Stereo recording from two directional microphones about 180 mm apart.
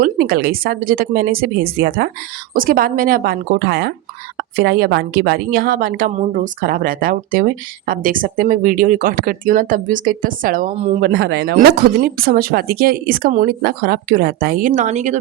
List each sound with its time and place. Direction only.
0.0 s a woman's voice: 55° right (ahead or behind)
11.0 s speech: 70° right (ahead or behind)
11.5 s a woman's voice: 55° right (ahead or behind); by 15.2 s 40° right (ahead or behind)